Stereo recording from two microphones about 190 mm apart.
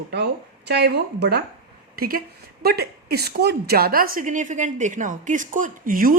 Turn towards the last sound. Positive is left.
turn(degrees=-45)  # may be behind; listen again after turning